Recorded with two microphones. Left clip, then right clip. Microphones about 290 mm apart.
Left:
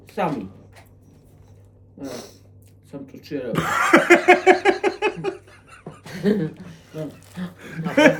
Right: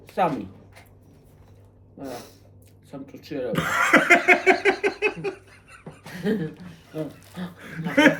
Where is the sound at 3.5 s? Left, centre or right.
Centre.